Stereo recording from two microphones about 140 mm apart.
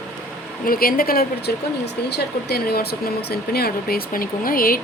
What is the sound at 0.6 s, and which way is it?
Speech, 90° left.